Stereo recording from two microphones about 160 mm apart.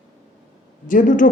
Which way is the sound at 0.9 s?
55° left (ahead or behind).